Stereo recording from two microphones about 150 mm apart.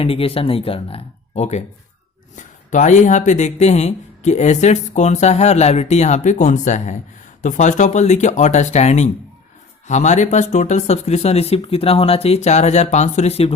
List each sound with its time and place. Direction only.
0.0 s speech: 40° left (ahead or behind)